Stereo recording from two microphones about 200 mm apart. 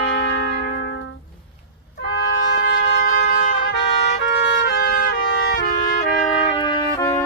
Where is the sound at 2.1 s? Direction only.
60° left (ahead or behind); by 6.6 s 40° left (ahead or behind).